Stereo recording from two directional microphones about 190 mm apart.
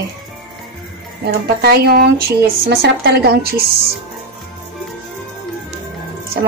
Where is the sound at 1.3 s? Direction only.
60° right (ahead or behind).